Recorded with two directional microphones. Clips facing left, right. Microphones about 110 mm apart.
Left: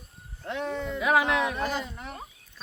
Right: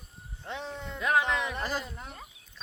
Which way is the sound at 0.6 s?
85° left.